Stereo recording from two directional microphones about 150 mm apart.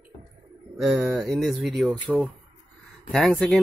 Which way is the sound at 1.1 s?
Centre (ahead or behind).